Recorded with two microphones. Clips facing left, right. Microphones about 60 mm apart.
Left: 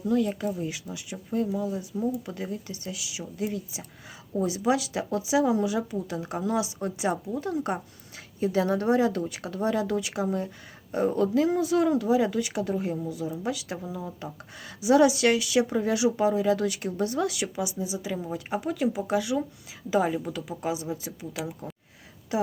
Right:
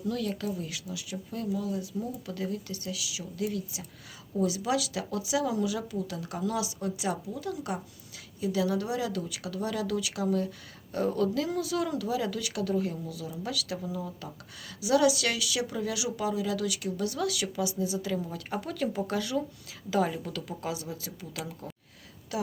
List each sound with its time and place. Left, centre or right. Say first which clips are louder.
0.0 s speech: left 6 dB; left